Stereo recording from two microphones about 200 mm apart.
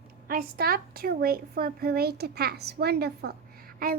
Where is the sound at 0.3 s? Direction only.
45° right (ahead or behind).